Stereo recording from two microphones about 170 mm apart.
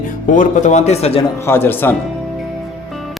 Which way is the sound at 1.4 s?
15° left (ahead or behind).